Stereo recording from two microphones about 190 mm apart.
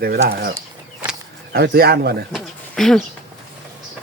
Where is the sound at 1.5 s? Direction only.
55° right (ahead or behind).